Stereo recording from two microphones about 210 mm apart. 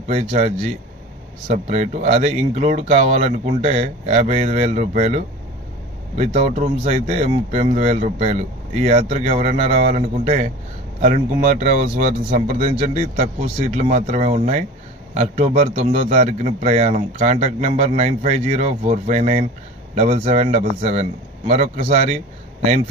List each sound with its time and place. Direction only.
0.1 s a man's voice: 35° right (ahead or behind)
1.6 s a man's voice: 30° right (ahead or behind)